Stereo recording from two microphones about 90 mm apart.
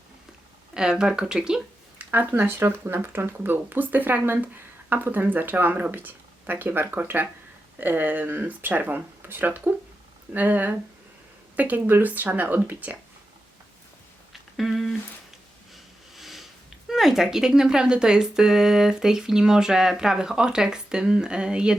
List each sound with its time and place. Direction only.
0.7 s speech: 10° right (ahead or behind)
14.5 s a sound: centre (ahead or behind)
15.7 s speech: centre (ahead or behind)